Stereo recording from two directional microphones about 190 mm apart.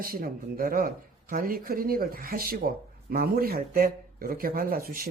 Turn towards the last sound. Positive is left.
turn(degrees=-50)  # may be behind; listen again after turning